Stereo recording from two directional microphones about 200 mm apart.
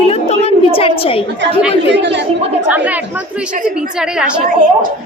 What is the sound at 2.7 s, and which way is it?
Speech, 10° right (ahead or behind).